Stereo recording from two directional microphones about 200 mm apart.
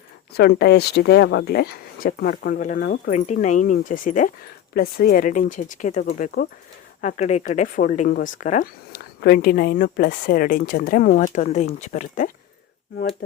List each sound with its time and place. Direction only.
0.3 s speech: 55° left (ahead or behind)
7.0 s speech: 35° left (ahead or behind)